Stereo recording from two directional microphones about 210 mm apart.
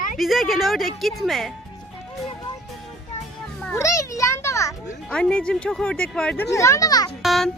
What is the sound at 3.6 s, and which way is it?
Children playing, 15° left (ahead or behind).